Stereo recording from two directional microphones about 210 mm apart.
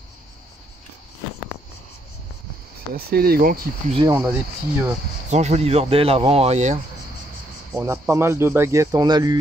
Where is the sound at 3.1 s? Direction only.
45° right (ahead or behind).